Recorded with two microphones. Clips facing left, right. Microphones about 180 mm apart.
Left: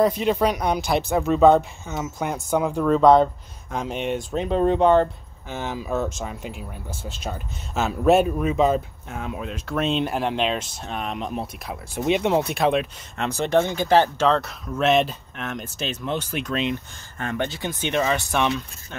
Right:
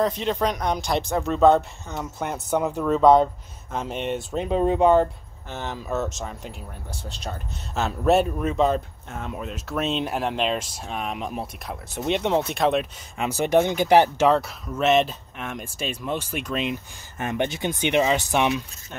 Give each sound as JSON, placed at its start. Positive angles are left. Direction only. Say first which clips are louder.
{"t": 0.0, "sound": "speech", "louder": "left 3 dB", "side_deg": 10}
{"t": 4.2, "sound": "speech", "louder": "left 1 dB", "side_deg": -5}
{"t": 5.6, "sound": "speech", "louder": "left 2 dB", "side_deg": 5}
{"t": 13.3, "sound": "speech", "louder": "right 1 dB", "side_deg": -10}
{"t": 17.2, "sound": "speech", "louder": "right 1 dB", "side_deg": -20}